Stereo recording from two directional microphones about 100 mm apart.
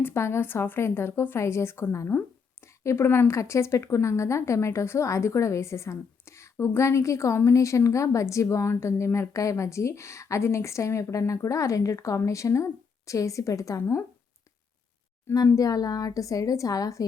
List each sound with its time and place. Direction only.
0.0 s speech: 25° left (ahead or behind)
15.3 s speech: 30° left (ahead or behind)